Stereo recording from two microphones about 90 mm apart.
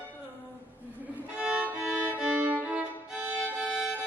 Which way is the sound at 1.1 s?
15° right (ahead or behind).